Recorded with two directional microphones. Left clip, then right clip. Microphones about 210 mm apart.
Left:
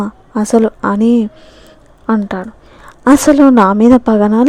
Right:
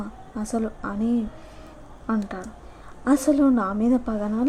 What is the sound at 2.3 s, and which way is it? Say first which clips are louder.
A woman's voice: left 13 dB; 45° left (ahead or behind).